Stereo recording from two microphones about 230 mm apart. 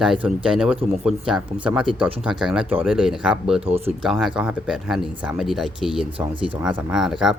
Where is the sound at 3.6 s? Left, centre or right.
Right.